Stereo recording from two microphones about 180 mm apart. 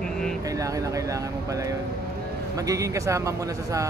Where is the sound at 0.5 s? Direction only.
20° right (ahead or behind).